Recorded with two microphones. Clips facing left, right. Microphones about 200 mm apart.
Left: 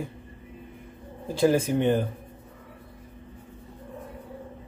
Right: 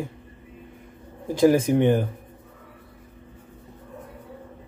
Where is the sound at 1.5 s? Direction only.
15° right (ahead or behind).